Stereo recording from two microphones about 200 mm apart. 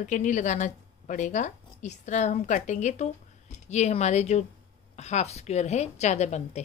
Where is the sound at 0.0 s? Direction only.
40° left (ahead or behind).